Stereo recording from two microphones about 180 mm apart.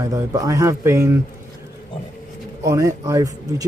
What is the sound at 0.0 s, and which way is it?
Speech, 20° right (ahead or behind).